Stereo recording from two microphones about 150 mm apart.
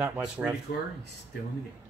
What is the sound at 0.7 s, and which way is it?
Speech, 90° left.